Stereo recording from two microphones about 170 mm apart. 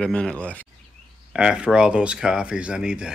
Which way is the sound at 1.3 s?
5° right (ahead or behind).